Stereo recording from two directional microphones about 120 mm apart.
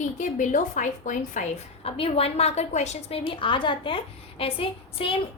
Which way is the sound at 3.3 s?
45° left (ahead or behind).